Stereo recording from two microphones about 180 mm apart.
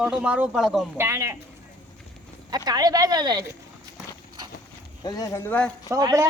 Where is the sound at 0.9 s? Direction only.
15° right (ahead or behind).